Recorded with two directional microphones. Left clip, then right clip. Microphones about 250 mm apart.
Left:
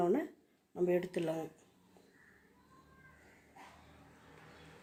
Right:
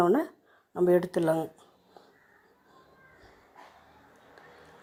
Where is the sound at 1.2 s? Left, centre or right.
Right.